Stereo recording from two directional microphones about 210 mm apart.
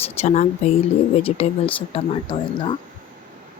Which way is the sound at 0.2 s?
30° left (ahead or behind).